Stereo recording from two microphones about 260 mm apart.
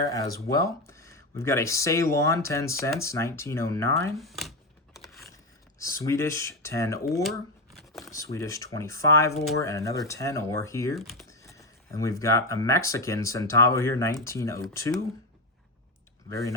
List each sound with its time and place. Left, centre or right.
0.0 s speech: centre
4.2 s shuffling cards: centre
5.8 s speech: centre
7.8 s a sound: centre
8.1 s speech: centre
10.9 s speech: centre
11.3 s speech: centre
16.3 s speech: centre